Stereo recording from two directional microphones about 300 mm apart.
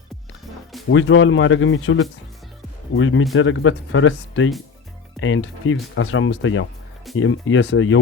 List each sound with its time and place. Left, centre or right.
0.9 s speech: left